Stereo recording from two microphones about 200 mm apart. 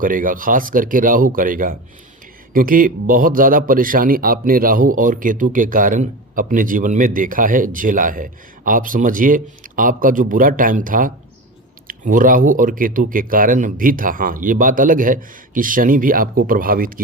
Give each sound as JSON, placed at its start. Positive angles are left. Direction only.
{"t": 0.0, "sound": "a man's voice", "side_deg": -45}